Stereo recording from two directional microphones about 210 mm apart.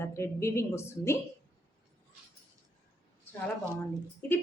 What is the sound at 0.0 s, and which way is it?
A woman's voice, 15° left (ahead or behind).